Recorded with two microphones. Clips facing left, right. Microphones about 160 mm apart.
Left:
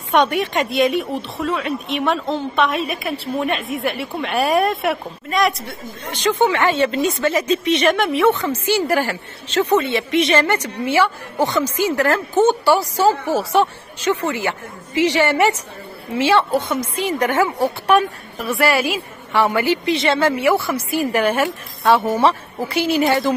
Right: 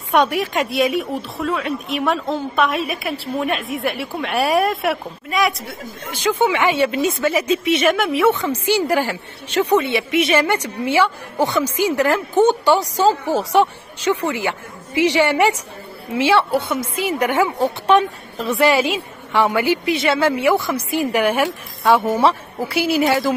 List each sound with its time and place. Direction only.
0.1 s a woman's voice: centre (ahead or behind)